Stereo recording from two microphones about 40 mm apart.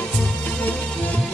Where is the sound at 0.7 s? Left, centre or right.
Left.